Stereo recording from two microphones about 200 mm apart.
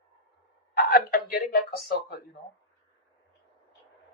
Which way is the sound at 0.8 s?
50° left (ahead or behind).